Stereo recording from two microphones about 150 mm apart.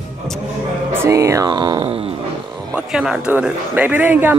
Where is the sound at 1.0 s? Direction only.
20° right (ahead or behind).